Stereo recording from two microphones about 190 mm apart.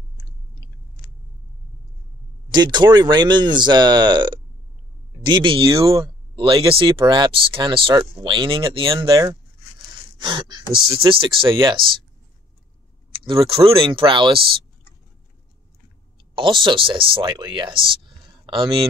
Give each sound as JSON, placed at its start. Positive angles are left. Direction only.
{"t": 2.5, "sound": "speech", "side_deg": -25}
{"t": 10.2, "sound": "speech", "side_deg": -25}
{"t": 13.3, "sound": "speech", "side_deg": -30}
{"t": 16.3, "sound": "speech", "side_deg": -25}